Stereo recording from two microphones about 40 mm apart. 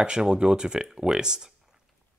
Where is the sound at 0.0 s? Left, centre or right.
Right.